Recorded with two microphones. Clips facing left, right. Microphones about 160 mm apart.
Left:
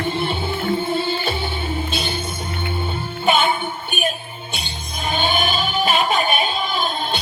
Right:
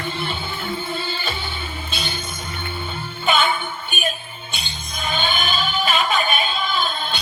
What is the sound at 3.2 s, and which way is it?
Music, 40° left (ahead or behind).